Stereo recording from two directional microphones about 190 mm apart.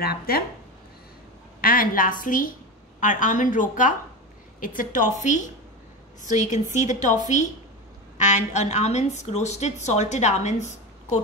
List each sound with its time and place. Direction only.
0.0 s a woman's voice: 55° left (ahead or behind)
1.6 s a woman's voice: 50° left (ahead or behind)